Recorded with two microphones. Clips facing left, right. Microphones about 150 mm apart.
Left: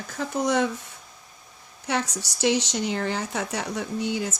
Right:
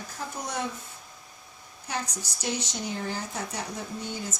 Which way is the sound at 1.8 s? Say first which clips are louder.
Left 7 dB; 90° left.